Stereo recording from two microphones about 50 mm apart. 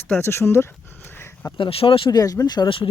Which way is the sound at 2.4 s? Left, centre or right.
Left.